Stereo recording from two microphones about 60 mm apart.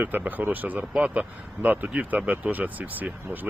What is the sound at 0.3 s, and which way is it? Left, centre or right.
Speech, right.